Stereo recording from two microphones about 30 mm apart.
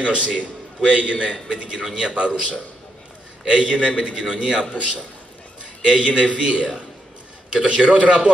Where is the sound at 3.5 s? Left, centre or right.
Right.